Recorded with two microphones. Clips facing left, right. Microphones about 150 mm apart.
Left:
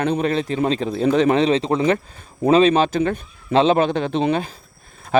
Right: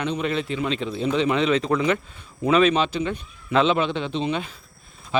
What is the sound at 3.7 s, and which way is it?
A man's voice, 45° left (ahead or behind).